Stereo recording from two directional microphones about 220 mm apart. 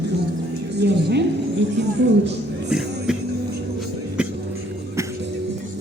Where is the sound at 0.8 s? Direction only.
50° right (ahead or behind).